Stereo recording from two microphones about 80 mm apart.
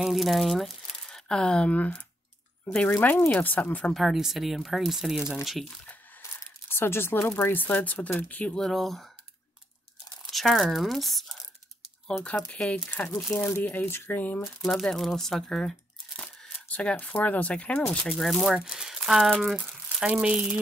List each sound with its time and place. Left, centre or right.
0.0 s speech: centre
2.9 s speech: left
3.9 s speech: centre
6.7 s speech: left
8.5 s speech: centre
10.3 s speech: centre
12.3 s speech: centre
14.4 s speech: centre
16.2 s speech: centre
18.0 s speech: centre